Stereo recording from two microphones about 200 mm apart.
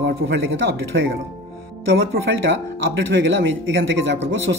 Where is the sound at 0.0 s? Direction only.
70° right (ahead or behind).